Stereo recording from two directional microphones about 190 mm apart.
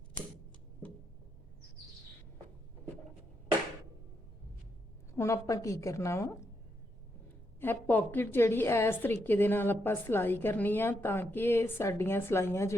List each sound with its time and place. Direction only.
5.1 s a woman's voice: 15° left (ahead or behind)
7.6 s a woman's voice: 10° left (ahead or behind)